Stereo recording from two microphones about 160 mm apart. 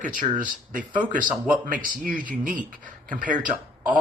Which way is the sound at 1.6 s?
60° right (ahead or behind).